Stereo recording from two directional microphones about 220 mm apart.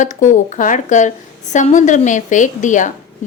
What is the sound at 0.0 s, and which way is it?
A woman's voice, 35° left (ahead or behind).